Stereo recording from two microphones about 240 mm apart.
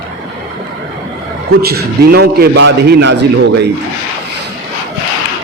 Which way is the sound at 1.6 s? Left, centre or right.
Right.